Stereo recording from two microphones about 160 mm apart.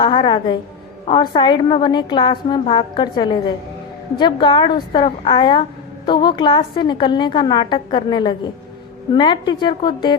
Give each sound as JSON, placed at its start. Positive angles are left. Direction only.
{"t": 0.0, "sound": "a woman's voice", "side_deg": 30}